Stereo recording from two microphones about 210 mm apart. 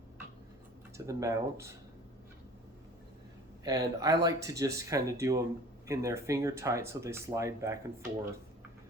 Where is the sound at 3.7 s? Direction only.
15° right (ahead or behind).